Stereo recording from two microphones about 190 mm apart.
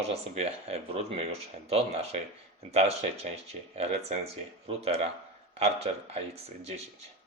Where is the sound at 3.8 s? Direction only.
35° right (ahead or behind).